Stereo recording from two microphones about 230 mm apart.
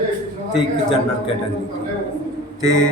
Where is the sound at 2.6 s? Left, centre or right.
Centre.